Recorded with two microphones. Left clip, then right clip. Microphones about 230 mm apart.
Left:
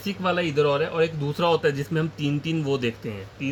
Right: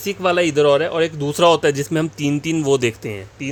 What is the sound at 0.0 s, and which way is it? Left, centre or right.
Speech, right.